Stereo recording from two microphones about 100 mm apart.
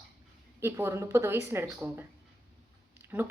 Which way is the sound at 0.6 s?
25° right (ahead or behind).